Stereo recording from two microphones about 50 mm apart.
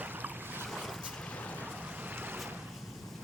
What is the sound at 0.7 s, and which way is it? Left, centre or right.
Boat, centre.